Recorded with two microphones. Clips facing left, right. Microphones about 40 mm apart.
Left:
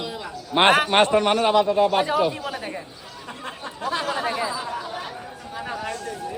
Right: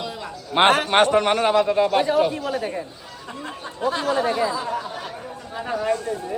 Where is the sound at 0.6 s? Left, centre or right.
Centre.